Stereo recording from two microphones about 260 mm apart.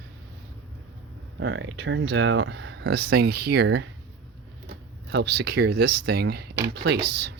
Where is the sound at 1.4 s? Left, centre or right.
Right.